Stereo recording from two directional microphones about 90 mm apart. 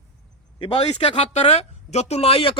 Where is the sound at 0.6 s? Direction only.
75° left (ahead or behind).